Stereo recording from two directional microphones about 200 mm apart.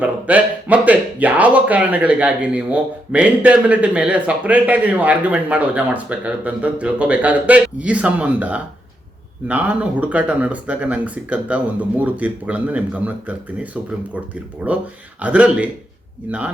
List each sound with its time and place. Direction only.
0.0 s speech: 5° right (ahead or behind)